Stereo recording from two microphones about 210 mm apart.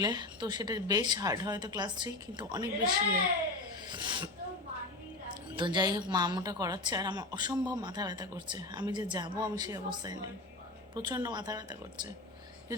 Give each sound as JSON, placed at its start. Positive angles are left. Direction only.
{"t": 0.0, "sound": "a woman's voice", "side_deg": -20}
{"t": 3.8, "sound": "sneeze", "side_deg": -20}
{"t": 5.3, "sound": "a woman's voice", "side_deg": -20}